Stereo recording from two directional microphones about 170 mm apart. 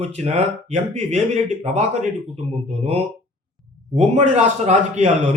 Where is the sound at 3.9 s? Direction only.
40° right (ahead or behind).